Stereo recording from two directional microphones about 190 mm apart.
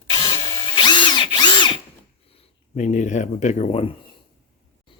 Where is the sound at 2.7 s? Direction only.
40° left (ahead or behind).